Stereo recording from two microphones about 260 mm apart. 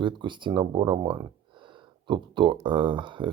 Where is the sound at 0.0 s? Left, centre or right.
Centre.